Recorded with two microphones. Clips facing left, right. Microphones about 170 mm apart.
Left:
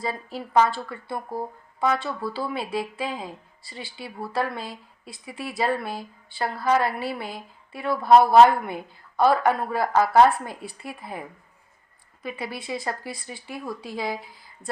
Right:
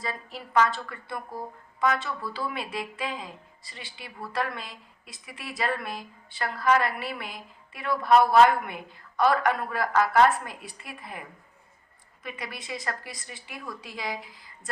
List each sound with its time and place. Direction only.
0.0 s a woman's voice: 30° left (ahead or behind)
12.2 s a woman's voice: 30° left (ahead or behind)